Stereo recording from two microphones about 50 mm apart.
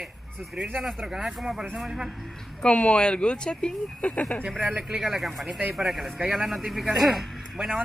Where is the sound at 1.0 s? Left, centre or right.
Centre.